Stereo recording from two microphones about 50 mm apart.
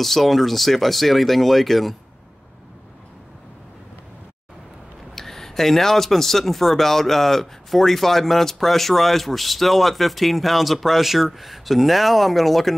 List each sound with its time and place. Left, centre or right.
0.0 s speech: centre
5.1 s speech: centre